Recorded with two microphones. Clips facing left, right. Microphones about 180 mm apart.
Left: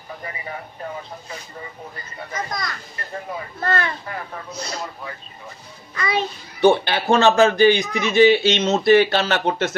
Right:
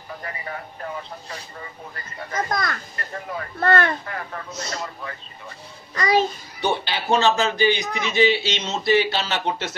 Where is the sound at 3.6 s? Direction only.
60° right (ahead or behind).